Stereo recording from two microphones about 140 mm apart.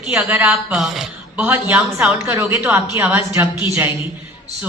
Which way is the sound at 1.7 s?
10° right (ahead or behind).